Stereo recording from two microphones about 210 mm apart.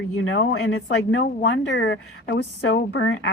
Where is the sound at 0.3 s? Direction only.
60° left (ahead or behind).